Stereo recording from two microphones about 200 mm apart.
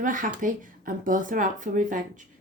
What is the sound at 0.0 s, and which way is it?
Speech, 40° right (ahead or behind).